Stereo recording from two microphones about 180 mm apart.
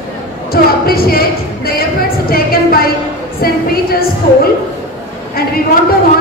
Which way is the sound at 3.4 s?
55° left (ahead or behind).